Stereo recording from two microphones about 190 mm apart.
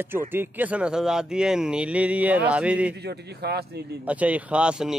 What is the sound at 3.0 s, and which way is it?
A man's voice, 60° right (ahead or behind).